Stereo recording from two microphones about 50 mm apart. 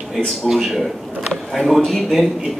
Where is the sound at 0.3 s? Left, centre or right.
Centre.